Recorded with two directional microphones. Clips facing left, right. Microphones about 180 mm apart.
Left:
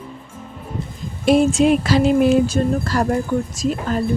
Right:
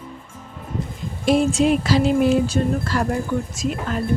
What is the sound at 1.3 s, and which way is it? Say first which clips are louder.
Speech: left 3 dB; 55° left (ahead or behind).